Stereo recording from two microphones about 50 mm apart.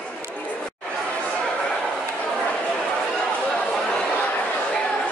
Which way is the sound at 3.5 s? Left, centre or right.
Centre.